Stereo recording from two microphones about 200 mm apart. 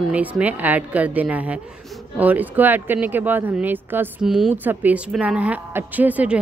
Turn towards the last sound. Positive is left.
turn(degrees=-5)  # may be behind; listen again after turning